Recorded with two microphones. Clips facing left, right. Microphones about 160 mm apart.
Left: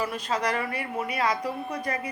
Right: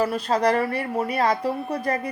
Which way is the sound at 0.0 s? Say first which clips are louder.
Right 7 dB; 35° right (ahead or behind).